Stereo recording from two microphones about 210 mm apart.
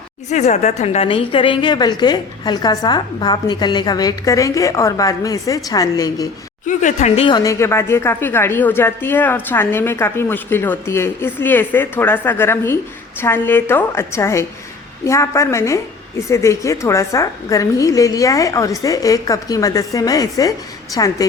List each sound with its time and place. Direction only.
0.3 s speech: 35° left (ahead or behind); by 6.2 s 15° left (ahead or behind)
6.7 s speech: 35° left (ahead or behind); by 21.2 s 15° left (ahead or behind)